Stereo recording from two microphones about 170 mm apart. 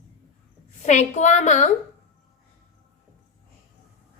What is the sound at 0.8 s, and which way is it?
Speech, 45° left (ahead or behind).